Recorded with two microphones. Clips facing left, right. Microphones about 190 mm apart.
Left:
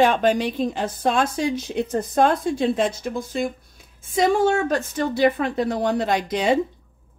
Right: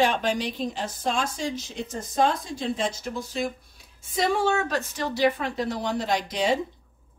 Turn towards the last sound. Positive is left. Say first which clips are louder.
# left 4 dB
turn(degrees=55)  # may be behind; listen again after turning